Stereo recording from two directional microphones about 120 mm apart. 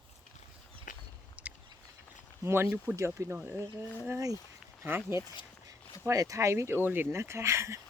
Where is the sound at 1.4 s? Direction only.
10° right (ahead or behind).